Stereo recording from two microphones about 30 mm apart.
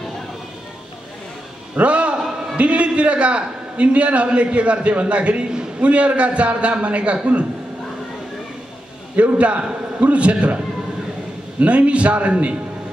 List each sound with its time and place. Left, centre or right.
1.8 s a man's voice: right
5.4 s a sound: right
5.8 s a man's voice: right
9.1 s a man's voice: right
11.6 s a man's voice: right